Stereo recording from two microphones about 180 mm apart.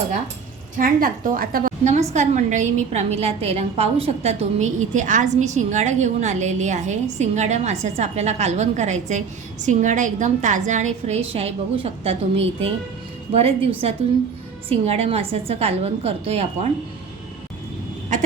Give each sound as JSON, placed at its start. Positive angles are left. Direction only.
{"t": 0.8, "sound": "a woman's voice", "side_deg": -50}